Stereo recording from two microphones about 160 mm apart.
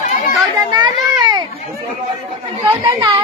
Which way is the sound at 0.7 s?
25° right (ahead or behind).